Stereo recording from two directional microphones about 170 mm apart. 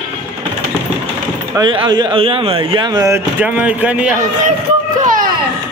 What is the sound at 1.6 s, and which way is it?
Speech, 25° right (ahead or behind).